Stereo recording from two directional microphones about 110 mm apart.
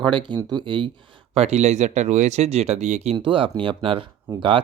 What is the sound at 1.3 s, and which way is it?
Speech, 80° right.